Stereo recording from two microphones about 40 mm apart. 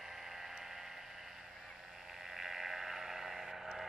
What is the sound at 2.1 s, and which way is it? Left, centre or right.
Sheep, centre.